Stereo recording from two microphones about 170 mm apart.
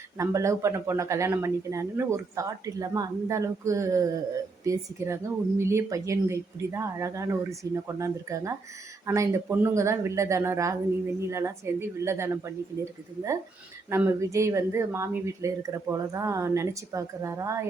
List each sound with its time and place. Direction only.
0.2 s speech: 15° right (ahead or behind)